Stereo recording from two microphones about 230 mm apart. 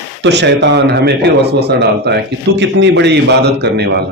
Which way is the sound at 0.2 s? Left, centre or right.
Right.